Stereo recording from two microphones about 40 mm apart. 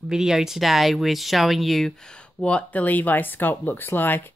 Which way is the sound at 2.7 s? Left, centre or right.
Left.